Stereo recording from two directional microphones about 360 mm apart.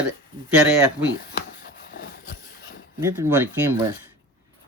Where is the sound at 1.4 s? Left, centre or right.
Left.